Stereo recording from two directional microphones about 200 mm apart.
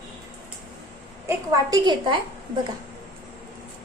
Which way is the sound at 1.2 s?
20° right (ahead or behind).